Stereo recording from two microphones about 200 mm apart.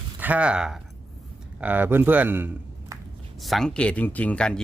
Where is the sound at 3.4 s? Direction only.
Centre (ahead or behind).